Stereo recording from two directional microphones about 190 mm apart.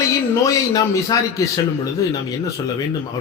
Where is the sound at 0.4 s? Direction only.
15° left (ahead or behind).